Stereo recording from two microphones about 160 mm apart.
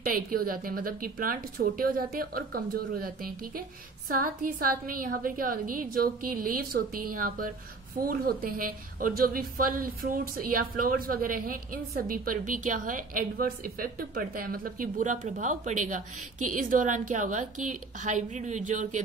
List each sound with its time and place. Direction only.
0.1 s a woman's voice: 65° right (ahead or behind)